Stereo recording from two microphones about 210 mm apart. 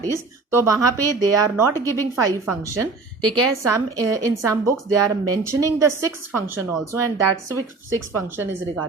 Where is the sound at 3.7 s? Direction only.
15° right (ahead or behind).